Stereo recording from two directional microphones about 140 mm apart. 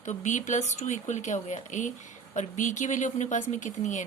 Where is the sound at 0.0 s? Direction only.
60° left (ahead or behind).